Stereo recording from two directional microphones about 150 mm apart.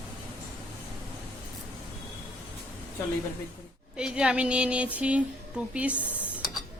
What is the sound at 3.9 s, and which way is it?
Speech, 5° right (ahead or behind).